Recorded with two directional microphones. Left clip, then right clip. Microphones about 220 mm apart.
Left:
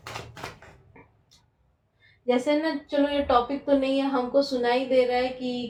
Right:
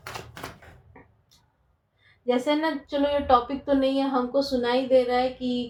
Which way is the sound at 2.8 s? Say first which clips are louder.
Even; 40° right (ahead or behind).